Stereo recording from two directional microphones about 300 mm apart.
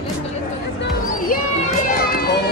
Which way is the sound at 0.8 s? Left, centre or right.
Left.